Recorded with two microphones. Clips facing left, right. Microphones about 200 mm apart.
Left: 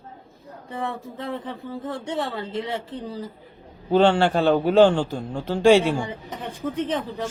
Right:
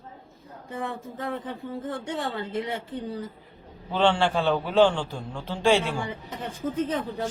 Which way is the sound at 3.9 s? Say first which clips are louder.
Left 5 dB; 40° left (ahead or behind).